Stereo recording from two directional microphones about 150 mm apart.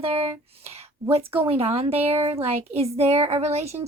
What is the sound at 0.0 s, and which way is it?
Speech, 40° right (ahead or behind).